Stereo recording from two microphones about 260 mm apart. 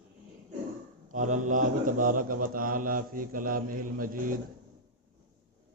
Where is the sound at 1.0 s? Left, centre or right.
Right.